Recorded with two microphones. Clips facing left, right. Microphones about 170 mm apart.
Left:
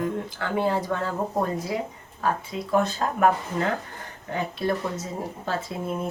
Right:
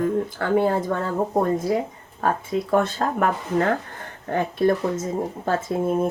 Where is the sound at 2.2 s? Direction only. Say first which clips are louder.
Right 4 dB; 50° right (ahead or behind).